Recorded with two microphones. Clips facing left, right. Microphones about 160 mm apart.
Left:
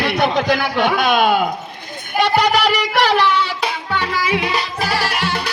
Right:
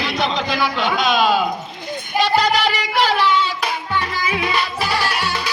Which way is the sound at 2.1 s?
60° left (ahead or behind).